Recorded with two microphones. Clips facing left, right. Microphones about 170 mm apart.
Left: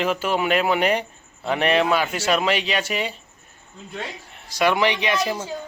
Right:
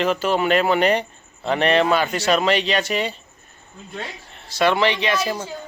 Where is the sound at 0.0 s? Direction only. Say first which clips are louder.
Right 2 dB; 10° left (ahead or behind).